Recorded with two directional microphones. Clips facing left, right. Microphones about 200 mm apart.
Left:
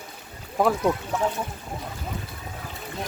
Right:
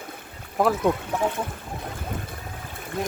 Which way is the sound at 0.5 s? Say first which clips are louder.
Even; centre (ahead or behind).